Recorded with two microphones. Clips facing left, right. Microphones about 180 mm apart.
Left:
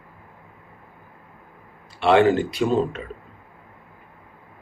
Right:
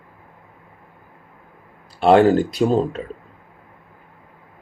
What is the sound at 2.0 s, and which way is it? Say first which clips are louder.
Speech: right 3 dB; 40° right (ahead or behind).